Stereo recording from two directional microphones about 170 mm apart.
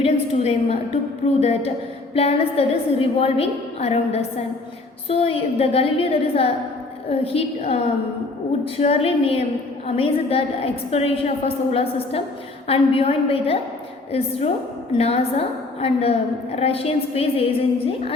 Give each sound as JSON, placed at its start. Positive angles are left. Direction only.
{"t": 0.0, "sound": "a woman's voice", "side_deg": 35}